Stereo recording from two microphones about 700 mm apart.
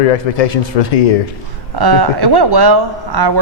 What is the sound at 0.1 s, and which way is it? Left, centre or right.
Speech, left.